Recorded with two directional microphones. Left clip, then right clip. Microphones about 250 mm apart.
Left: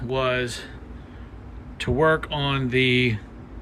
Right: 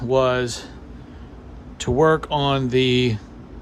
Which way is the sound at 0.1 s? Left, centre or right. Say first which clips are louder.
Right 5 dB; centre.